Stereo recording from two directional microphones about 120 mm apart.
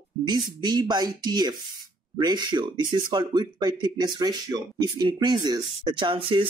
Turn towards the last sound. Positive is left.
turn(degrees=-45)  # may be behind; listen again after turning